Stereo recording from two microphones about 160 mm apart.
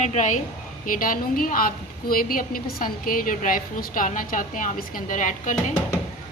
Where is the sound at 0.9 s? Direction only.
60° left (ahead or behind).